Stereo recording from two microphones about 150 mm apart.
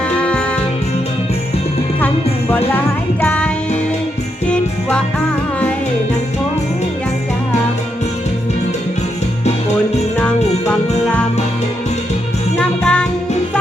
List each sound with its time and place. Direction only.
0.1 s music: 10° left (ahead or behind)
2.5 s music: 10° left (ahead or behind)
4.4 s jingle bell: 5° left (ahead or behind)
9.4 s music: 45° left (ahead or behind)
10.2 s music: 10° left (ahead or behind)
12.5 s music: 5° left (ahead or behind)